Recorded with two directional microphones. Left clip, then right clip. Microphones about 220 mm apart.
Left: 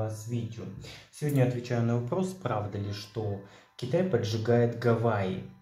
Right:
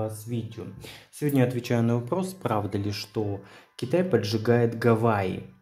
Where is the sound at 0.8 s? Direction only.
50° right (ahead or behind).